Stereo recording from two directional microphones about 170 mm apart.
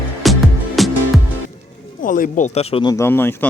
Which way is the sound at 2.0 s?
50° left (ahead or behind).